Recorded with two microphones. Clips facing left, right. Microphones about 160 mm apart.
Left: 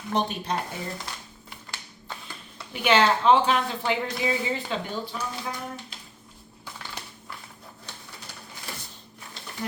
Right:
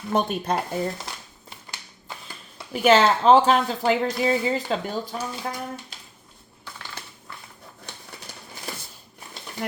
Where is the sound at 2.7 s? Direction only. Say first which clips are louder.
Right 4 dB; 40° right (ahead or behind).